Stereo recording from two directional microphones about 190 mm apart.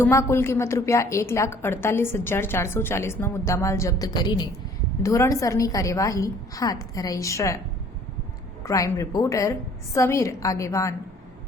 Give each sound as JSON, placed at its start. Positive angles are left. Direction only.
{"t": 0.0, "sound": "a woman's voice", "side_deg": 15}
{"t": 8.6, "sound": "a woman's voice", "side_deg": 15}